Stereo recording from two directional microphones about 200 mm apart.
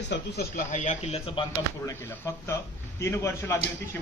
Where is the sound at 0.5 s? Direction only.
35° left (ahead or behind).